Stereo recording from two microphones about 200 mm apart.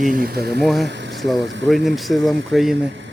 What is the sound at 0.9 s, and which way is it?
Vehicle, 65° right (ahead or behind).